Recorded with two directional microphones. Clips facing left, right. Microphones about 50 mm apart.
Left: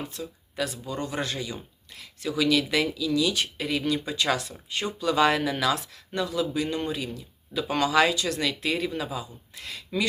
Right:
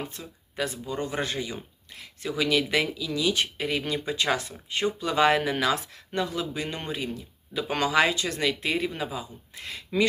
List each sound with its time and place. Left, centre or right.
0.1 s speech: right